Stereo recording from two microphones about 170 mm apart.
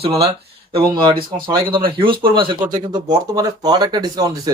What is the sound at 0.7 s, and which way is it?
Speech, 30° right (ahead or behind).